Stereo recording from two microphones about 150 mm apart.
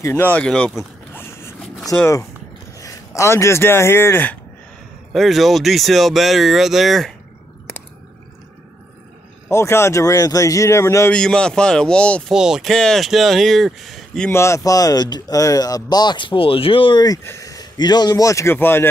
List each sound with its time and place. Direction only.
0.0 s speech: 15° left (ahead or behind)
1.1 s a sound: 15° left (ahead or behind)
1.9 s speech: 20° left (ahead or behind)
5.1 s speech: centre (ahead or behind)
9.5 s speech: 20° left (ahead or behind)
11.1 s speech: 5° left (ahead or behind)
12.4 s speech: 5° right (ahead or behind)
14.3 s speech: 20° left (ahead or behind)